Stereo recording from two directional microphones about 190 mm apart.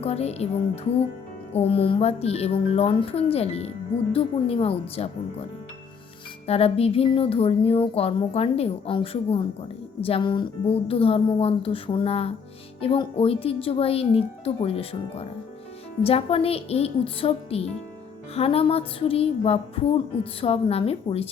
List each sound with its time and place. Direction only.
0.0 s speech: 35° left (ahead or behind)
6.5 s speech: 30° left (ahead or behind)